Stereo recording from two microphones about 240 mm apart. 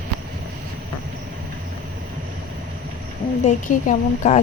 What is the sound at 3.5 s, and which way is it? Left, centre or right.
Speech, left.